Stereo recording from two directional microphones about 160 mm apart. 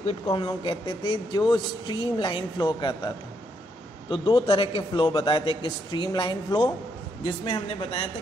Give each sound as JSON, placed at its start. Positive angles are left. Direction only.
{"t": 0.3, "sound": "a man's voice", "side_deg": 35}
{"t": 4.1, "sound": "a man's voice", "side_deg": 30}